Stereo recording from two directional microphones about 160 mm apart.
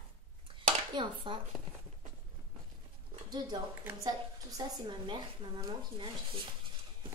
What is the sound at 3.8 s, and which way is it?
A woman's voice, 25° right (ahead or behind).